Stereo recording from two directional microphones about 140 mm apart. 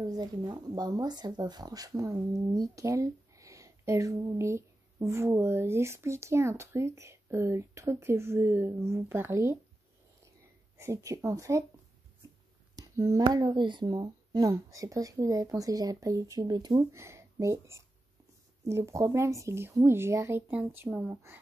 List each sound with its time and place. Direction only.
0.0 s speech: 30° right (ahead or behind)
10.8 s speech: 20° right (ahead or behind)
12.7 s speech: 25° right (ahead or behind)